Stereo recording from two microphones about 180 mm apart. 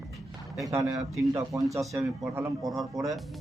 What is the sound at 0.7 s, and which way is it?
A man's voice, 15° right (ahead or behind).